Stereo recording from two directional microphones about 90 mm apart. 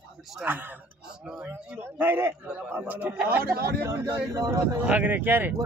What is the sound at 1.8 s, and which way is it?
A man's voice, 25° right (ahead or behind).